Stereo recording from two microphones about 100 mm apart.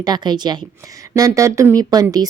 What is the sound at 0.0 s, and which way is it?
Speech, 45° right (ahead or behind).